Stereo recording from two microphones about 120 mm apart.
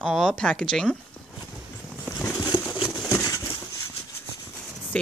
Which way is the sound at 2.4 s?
40° left (ahead or behind).